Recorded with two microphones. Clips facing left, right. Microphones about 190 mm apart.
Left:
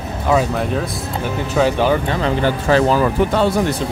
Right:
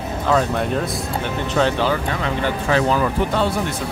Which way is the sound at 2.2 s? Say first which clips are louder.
Left 4 dB; 35° left (ahead or behind).